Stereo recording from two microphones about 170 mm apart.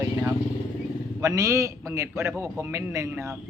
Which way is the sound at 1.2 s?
15° right (ahead or behind).